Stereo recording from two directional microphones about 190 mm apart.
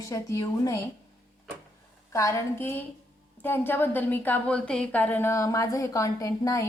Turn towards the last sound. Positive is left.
turn(degrees=15)  # may be behind; listen again after turning